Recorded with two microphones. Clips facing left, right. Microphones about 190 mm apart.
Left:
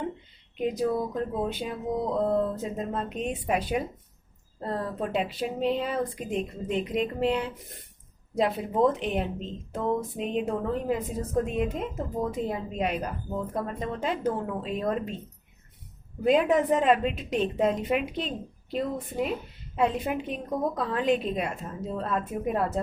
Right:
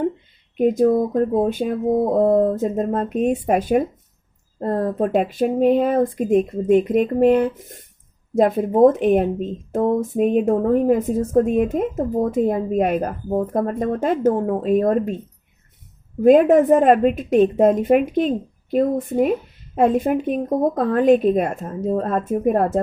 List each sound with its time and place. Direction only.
0.5 s a woman's voice: 50° right (ahead or behind)
16.2 s a woman's voice: 50° right (ahead or behind)